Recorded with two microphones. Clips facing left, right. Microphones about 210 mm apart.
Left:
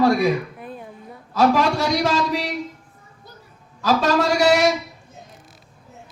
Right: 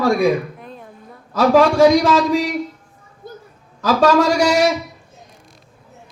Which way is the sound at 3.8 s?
45° right (ahead or behind).